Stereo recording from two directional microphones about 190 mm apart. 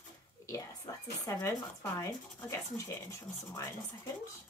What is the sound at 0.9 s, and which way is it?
Speech, 20° left (ahead or behind).